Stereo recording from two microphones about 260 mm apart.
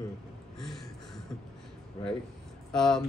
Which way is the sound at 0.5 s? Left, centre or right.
Centre.